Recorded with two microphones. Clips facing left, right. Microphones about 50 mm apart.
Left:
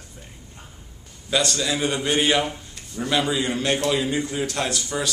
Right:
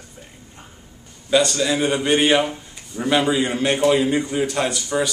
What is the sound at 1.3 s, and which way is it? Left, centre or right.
A man's voice, centre.